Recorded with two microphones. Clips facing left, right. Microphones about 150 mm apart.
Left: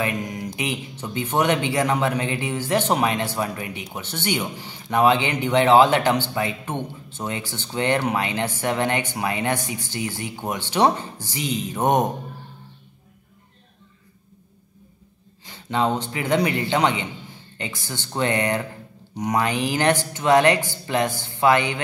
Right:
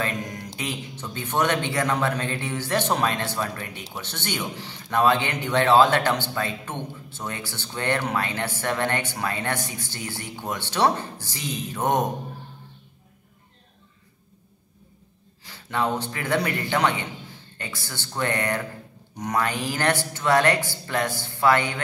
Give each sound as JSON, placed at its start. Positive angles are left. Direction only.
{"t": 0.0, "sound": "mantra", "side_deg": 15}
{"t": 0.6, "sound": "speech", "side_deg": 15}
{"t": 15.4, "sound": "a man's voice", "side_deg": 20}